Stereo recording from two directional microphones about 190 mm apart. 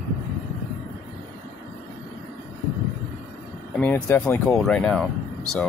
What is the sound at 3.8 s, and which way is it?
Speech, 10° left (ahead or behind).